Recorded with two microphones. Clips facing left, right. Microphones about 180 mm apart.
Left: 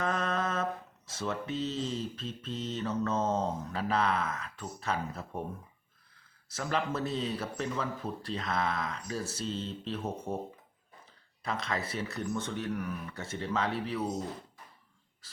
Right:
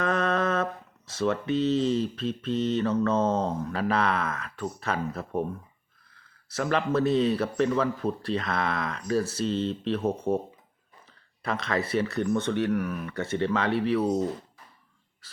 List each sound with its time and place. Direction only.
0.0 s speech: 70° right (ahead or behind)
6.5 s speech: 70° right (ahead or behind)
11.4 s speech: 70° right (ahead or behind)